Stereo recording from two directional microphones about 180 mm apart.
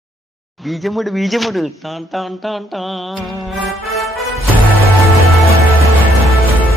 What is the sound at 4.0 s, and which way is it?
Music, centre (ahead or behind).